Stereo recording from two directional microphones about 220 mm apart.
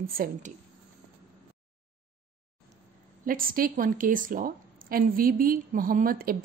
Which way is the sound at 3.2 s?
40° right (ahead or behind).